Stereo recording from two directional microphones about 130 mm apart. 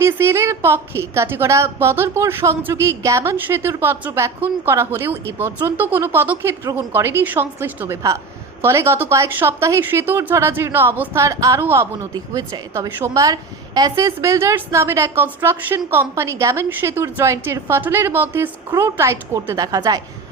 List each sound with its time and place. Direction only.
0.0 s a woman's voice: 20° right (ahead or behind)